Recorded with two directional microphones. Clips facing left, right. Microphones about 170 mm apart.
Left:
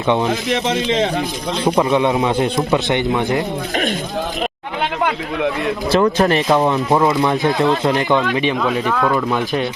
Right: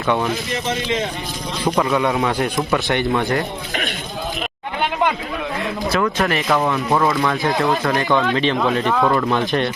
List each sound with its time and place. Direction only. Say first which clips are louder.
1.6 s speech: left 3 dB; 25° left (ahead or behind)
5.9 s speech: left 6 dB; 25° left (ahead or behind)
8.5 s speech: even; centre (ahead or behind)
9.1 s speech: even; 5° left (ahead or behind)